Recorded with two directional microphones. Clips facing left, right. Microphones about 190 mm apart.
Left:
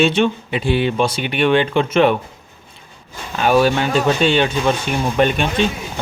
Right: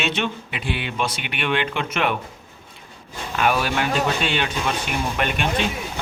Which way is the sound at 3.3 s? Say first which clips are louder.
Left 7 dB; 30° left (ahead or behind).